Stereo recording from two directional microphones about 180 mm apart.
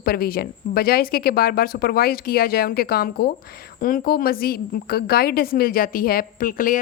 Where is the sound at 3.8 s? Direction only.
50° left (ahead or behind).